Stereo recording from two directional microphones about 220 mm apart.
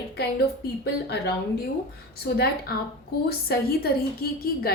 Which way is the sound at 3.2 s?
45° left (ahead or behind).